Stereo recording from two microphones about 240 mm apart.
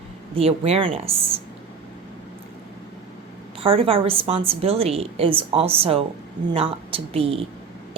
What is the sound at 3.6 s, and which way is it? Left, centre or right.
A woman's voice, right.